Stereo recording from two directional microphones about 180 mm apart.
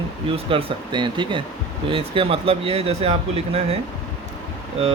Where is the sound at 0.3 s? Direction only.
30° right (ahead or behind).